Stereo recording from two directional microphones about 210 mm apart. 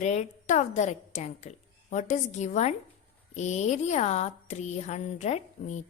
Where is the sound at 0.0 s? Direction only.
35° left (ahead or behind).